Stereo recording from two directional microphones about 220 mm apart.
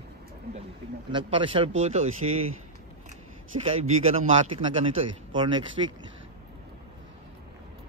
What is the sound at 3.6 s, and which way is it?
A woman's voice, 25° right (ahead or behind).